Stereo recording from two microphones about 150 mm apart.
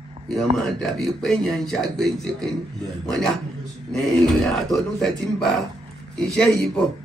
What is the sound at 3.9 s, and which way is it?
Speech, centre (ahead or behind).